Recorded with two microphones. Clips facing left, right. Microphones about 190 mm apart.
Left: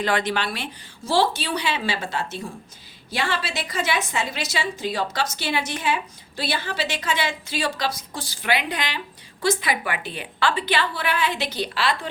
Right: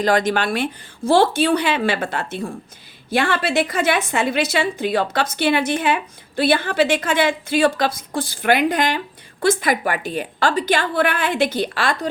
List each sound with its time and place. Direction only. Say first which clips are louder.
0.0 s a woman's voice: right 6 dB; 40° right (ahead or behind)